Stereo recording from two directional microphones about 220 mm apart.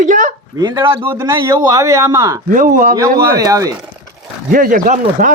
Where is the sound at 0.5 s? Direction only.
15° right (ahead or behind).